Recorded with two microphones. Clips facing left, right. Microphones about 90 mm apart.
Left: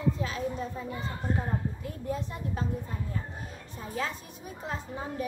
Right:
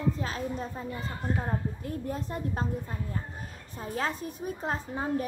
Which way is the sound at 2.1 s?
40° right (ahead or behind).